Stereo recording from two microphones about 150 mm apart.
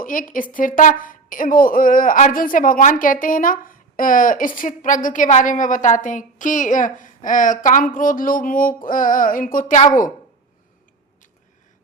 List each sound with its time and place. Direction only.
0.0 s a woman's voice: 65° left (ahead or behind)